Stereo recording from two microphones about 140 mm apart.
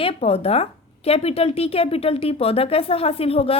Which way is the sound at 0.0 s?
45° left (ahead or behind).